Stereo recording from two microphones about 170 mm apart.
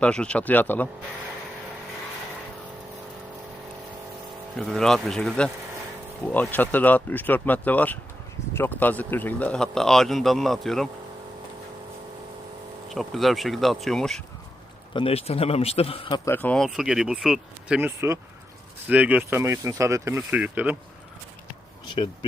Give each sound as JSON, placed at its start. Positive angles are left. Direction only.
{"t": 0.0, "sound": "speech", "side_deg": 5}
{"t": 4.5, "sound": "a man's voice", "side_deg": 0}
{"t": 12.9, "sound": "a man's voice", "side_deg": 0}
{"t": 14.9, "sound": "a man's voice", "side_deg": 35}
{"t": 16.3, "sound": "speech", "side_deg": 10}
{"t": 16.6, "sound": "a man's voice", "side_deg": -5}
{"t": 17.7, "sound": "speech", "side_deg": -15}
{"t": 21.8, "sound": "speech", "side_deg": 30}